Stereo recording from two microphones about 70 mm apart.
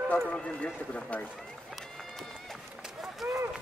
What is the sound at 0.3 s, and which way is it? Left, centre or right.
Speech, centre.